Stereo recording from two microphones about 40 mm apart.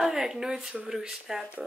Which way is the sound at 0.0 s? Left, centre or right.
Centre.